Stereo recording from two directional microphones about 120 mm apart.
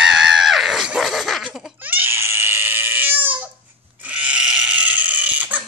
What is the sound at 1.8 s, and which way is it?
Screaming, 15° right (ahead or behind).